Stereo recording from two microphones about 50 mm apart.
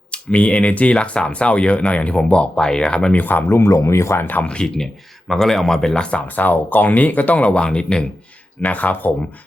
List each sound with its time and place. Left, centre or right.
0.1 s speech: left
3.1 s speech: left
3.5 s speech: left
4.2 s speech: left
4.4 s speech: centre
6.2 s speech: left
8.6 s speech: left